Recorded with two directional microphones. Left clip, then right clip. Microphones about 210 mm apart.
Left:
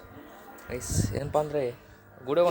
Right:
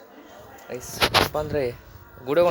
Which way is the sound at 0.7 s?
10° left (ahead or behind).